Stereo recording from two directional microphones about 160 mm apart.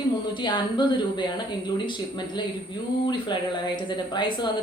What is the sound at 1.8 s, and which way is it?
A woman's voice, 30° left (ahead or behind).